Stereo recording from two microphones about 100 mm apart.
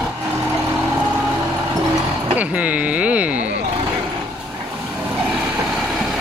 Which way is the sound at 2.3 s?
15° right (ahead or behind).